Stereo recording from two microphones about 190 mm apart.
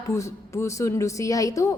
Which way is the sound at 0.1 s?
15° left (ahead or behind).